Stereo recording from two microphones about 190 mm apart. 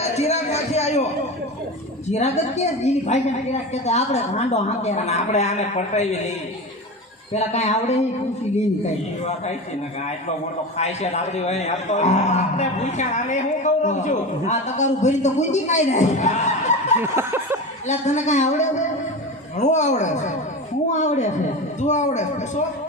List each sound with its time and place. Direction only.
0.0 s a sound: 35° left (ahead or behind)
2.0 s a man's voice: 35° left (ahead or behind)
7.3 s a man's voice: 35° left (ahead or behind)
10.8 s a man's voice: 35° left (ahead or behind)
17.0 s a sound: 10° right (ahead or behind)
17.8 s a man's voice: 40° left (ahead or behind)